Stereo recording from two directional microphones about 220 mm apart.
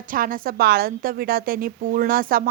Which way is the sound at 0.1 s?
40° right (ahead or behind).